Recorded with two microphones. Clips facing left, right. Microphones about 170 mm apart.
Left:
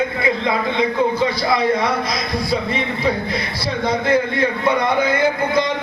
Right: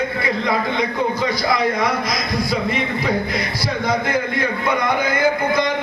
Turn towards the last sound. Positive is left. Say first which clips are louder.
# even
turn(degrees=30)  # may be behind; listen again after turning